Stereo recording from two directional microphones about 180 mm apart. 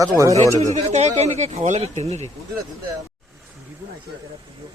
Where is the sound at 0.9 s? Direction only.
35° right (ahead or behind).